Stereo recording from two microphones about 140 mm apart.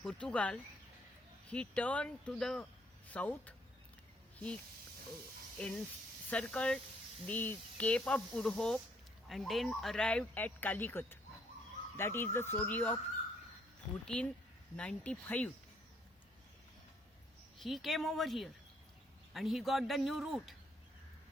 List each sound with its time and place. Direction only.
0.0 s speech: 10° left (ahead or behind)
5.5 s speech: 10° left (ahead or behind)
14.0 s speech: 5° left (ahead or behind)
17.6 s speech: centre (ahead or behind)